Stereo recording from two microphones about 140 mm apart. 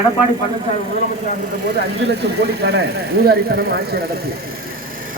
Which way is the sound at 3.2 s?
90° right.